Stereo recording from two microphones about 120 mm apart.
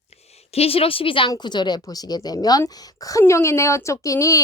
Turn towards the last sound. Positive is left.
turn(degrees=30)  # may be behind; listen again after turning